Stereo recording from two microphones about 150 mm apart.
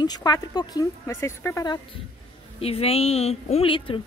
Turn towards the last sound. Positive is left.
turn(degrees=40)  # may be behind; listen again after turning